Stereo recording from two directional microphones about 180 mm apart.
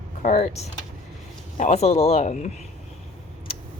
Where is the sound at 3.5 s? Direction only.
30° left (ahead or behind).